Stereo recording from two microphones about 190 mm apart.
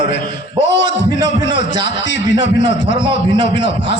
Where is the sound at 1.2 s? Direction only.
75° left (ahead or behind).